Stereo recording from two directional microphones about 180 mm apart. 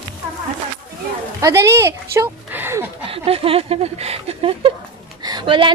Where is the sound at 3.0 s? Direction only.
30° right (ahead or behind).